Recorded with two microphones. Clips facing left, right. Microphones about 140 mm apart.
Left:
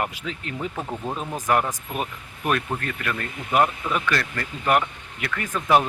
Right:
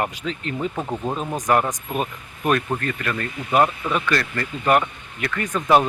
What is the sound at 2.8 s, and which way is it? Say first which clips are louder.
Speech: right 3 dB; 5° left (ahead or behind).